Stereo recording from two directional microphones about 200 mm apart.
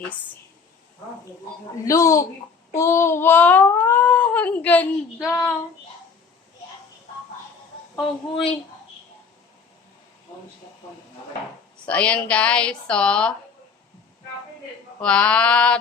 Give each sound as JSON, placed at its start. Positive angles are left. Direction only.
{"t": 1.8, "sound": "a sound", "side_deg": 15}
{"t": 11.9, "sound": "a woman's voice", "side_deg": 5}
{"t": 15.0, "sound": "a woman's voice", "side_deg": 5}